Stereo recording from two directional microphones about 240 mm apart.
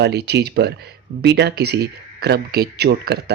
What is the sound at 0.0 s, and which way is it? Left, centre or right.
Speech, right.